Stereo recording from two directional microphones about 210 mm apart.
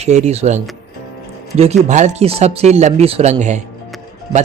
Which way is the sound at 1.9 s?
35° right (ahead or behind).